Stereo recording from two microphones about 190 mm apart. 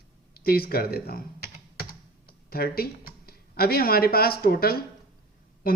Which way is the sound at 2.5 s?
50° left (ahead or behind).